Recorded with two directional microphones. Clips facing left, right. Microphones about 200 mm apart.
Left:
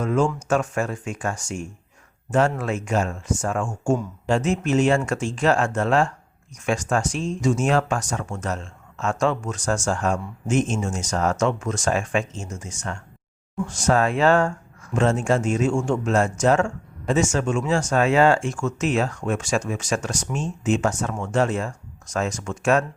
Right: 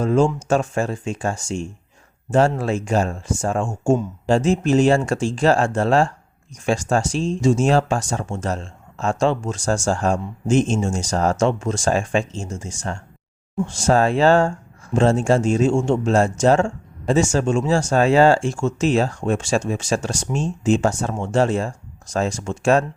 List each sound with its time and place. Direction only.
0.0 s speech: 30° right (ahead or behind)